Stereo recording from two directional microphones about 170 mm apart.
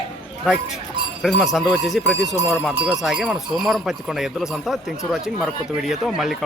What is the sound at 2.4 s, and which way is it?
Speech, 20° left (ahead or behind).